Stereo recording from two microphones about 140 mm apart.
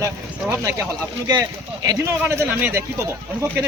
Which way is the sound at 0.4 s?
20° right (ahead or behind).